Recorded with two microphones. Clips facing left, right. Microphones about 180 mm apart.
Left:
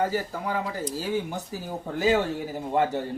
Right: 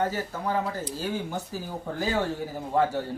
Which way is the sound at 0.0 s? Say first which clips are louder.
Left 1 dB; 10° left (ahead or behind).